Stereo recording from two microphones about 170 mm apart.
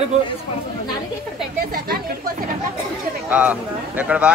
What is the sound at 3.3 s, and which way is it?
Speech, 10° right (ahead or behind).